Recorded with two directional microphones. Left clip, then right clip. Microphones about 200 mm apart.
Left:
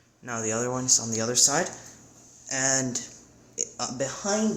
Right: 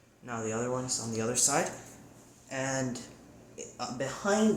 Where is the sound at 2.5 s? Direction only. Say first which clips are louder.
Left 6 dB; 55° left (ahead or behind).